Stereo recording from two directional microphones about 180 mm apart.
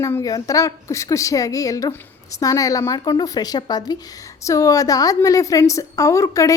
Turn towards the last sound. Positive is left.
turn(degrees=15)  # may be behind; listen again after turning